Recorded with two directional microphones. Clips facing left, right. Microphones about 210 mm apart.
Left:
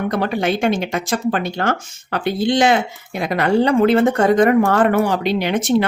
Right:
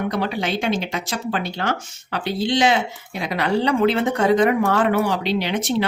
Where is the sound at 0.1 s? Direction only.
50° left (ahead or behind).